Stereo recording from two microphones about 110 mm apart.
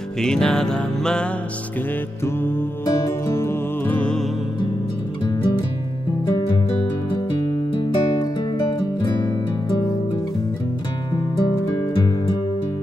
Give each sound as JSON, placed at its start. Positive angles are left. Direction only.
{"t": 0.2, "sound": "music", "side_deg": 5}
{"t": 2.2, "sound": "music", "side_deg": 20}
{"t": 5.2, "sound": "music", "side_deg": 35}
{"t": 7.7, "sound": "music", "side_deg": 45}